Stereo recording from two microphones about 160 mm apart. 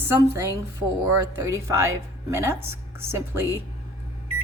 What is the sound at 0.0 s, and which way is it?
A woman's voice, 15° right (ahead or behind).